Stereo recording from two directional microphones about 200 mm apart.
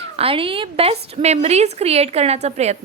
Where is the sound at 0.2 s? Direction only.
25° right (ahead or behind).